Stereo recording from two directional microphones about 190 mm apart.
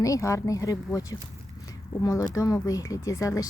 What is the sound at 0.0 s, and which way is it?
Speech, 15° left (ahead or behind).